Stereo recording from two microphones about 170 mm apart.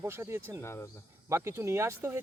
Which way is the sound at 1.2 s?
15° right (ahead or behind).